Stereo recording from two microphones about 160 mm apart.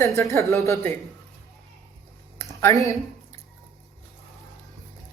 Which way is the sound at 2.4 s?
20° left (ahead or behind).